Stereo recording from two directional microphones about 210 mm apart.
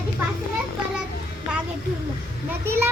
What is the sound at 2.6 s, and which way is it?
Children playing, 10° right (ahead or behind).